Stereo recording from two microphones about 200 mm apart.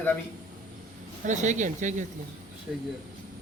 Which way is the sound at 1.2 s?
35° right (ahead or behind).